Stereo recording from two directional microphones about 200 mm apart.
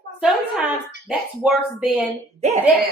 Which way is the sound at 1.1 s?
5° right (ahead or behind).